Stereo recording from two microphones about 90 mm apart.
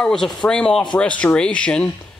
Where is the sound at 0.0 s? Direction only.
5° left (ahead or behind).